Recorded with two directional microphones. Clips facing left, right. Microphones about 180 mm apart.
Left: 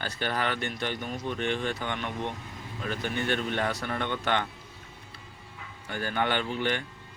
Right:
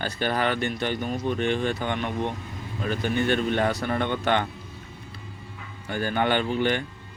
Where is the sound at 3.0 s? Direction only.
15° right (ahead or behind).